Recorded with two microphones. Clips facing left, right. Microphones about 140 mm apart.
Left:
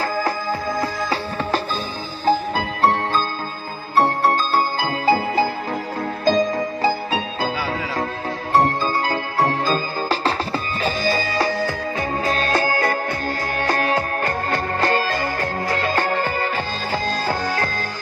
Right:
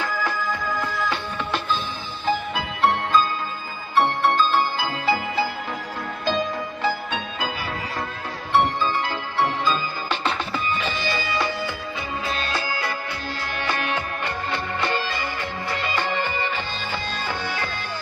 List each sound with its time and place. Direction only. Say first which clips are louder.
0.0 s music: left 4 dB; 35° left (ahead or behind)
8.5 s music: left 2 dB; 40° left (ahead or behind)